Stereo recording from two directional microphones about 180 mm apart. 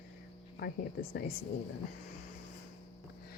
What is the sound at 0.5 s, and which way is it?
Speech, 60° left (ahead or behind).